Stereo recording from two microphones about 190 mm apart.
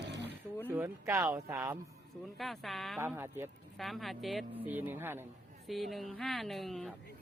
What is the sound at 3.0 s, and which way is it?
Speech, 15° right (ahead or behind).